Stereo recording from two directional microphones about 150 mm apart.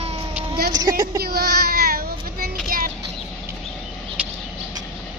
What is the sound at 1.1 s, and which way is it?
Child singing, 90° right.